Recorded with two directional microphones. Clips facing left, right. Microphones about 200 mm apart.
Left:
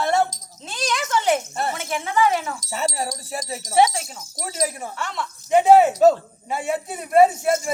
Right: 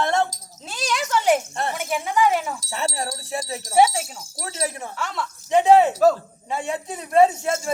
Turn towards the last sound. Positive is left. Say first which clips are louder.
# left 2 dB
turn(degrees=10)  # may be behind; listen again after turning